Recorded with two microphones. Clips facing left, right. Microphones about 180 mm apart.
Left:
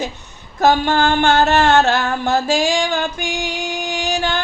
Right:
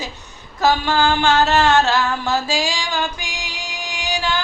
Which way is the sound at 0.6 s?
50° left (ahead or behind).